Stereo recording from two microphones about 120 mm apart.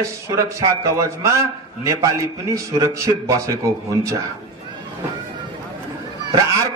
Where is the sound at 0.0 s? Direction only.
25° right (ahead or behind).